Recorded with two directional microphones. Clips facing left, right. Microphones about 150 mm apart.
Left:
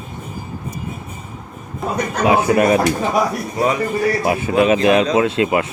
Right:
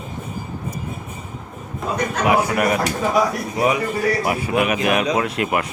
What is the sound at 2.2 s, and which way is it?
Speech, 25° left (ahead or behind).